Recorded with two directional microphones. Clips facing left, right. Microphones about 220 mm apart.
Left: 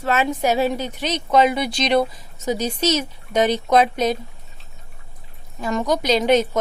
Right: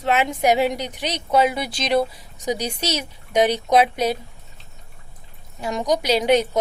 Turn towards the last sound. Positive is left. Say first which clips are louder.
# left 1 dB
turn(degrees=-10)  # may be behind; listen again after turning